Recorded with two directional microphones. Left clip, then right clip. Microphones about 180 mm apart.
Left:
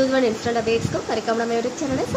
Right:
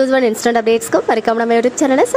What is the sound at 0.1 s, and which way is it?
A woman's voice, 55° right (ahead or behind).